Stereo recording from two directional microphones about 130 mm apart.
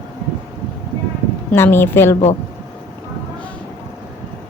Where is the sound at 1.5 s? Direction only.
15° left (ahead or behind).